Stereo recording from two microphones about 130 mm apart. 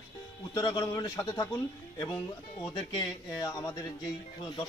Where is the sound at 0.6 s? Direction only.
30° left (ahead or behind).